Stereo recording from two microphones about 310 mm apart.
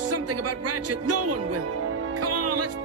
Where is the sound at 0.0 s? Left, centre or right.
Right.